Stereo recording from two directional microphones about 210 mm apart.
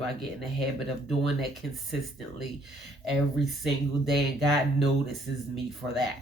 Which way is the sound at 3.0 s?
Centre (ahead or behind).